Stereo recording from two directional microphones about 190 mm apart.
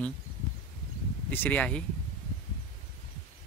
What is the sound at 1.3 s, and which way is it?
Speech, 10° left (ahead or behind).